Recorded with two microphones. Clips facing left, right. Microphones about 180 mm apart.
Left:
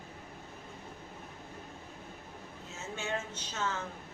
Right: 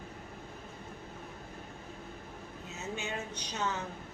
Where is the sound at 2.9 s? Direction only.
15° right (ahead or behind).